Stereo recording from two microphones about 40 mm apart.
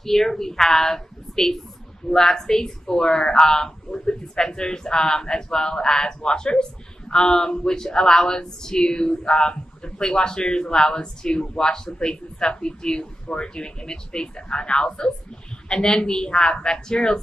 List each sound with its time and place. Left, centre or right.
0.0 s a woman's voice: centre